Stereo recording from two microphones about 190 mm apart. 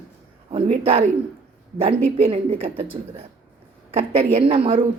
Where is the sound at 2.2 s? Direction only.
30° right (ahead or behind).